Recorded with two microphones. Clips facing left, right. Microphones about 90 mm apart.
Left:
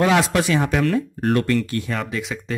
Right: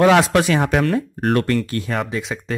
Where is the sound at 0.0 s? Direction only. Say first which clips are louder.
Right 4 dB; 50° right (ahead or behind).